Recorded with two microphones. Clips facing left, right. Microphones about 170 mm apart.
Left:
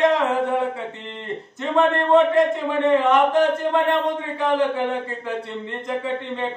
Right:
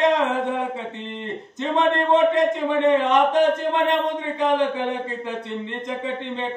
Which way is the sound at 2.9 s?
20° right (ahead or behind).